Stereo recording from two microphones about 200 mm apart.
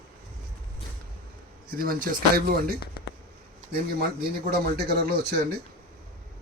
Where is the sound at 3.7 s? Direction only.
50° right (ahead or behind).